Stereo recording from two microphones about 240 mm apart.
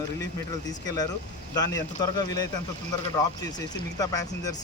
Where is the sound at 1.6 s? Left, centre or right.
Centre.